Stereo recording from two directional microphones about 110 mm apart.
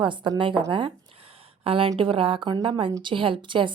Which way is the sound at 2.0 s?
55° right (ahead or behind).